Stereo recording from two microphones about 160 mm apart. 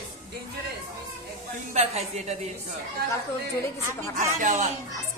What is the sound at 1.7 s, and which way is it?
Speech, 45° right (ahead or behind).